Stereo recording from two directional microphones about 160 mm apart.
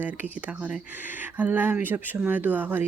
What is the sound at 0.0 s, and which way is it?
Speech, 10° right (ahead or behind).